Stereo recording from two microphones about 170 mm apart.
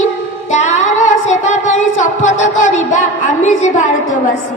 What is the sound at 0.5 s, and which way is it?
Singing, 45° left (ahead or behind).